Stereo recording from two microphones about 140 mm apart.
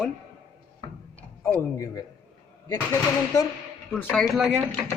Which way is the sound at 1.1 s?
15° left (ahead or behind).